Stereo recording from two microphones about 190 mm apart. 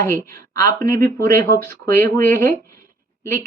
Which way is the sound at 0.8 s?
15° left (ahead or behind).